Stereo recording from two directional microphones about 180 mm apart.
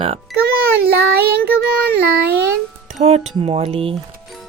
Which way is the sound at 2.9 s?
35° right (ahead or behind).